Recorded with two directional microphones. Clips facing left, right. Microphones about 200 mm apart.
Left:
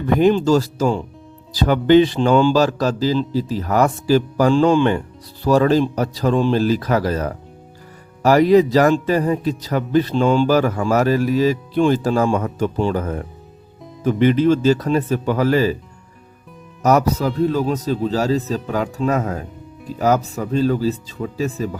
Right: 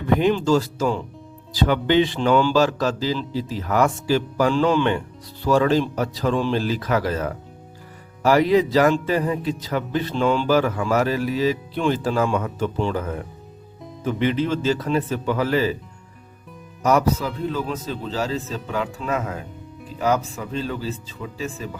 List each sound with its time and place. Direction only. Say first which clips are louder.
0.2 s a man's voice: left 4 dB; 40° left (ahead or behind)
16.8 s a man's voice: left 3 dB; 40° left (ahead or behind)